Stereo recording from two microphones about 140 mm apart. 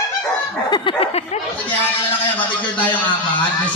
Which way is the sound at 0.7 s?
40° left (ahead or behind).